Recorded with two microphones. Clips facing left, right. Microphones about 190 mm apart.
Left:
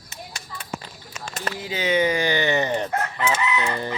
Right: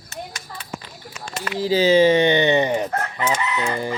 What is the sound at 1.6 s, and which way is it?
Speech, 30° right (ahead or behind).